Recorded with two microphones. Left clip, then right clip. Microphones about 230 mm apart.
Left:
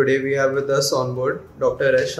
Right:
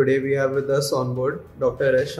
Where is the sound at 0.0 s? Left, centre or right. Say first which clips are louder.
Left 2 dB; right.